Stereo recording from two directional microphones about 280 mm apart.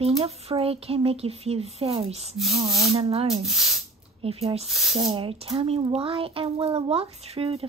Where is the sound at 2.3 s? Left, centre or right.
Centre.